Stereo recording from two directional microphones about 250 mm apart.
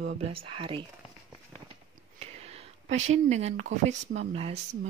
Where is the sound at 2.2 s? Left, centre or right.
Right.